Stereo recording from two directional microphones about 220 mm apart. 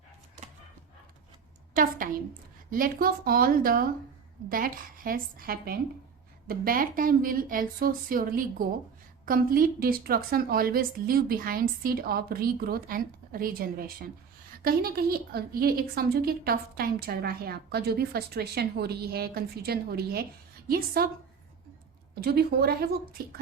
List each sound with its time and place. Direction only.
1.7 s a woman's voice: 40° right (ahead or behind)
22.1 s a woman's voice: 45° right (ahead or behind)